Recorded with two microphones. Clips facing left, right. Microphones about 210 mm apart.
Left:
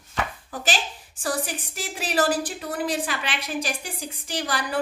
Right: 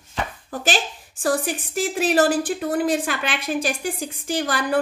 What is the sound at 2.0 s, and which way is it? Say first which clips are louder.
Speech: right 5 dB; 50° right (ahead or behind).